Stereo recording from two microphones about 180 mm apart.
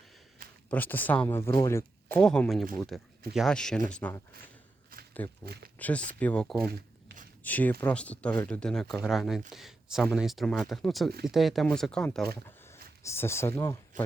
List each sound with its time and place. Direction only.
0.7 s speech: 10° left (ahead or behind)
5.5 s speech: 60° right (ahead or behind)
6.1 s speech: 5° left (ahead or behind)
12.5 s speech: 15° left (ahead or behind)